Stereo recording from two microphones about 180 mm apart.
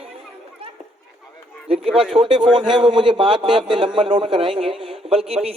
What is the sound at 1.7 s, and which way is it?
A man's voice, 35° right (ahead or behind).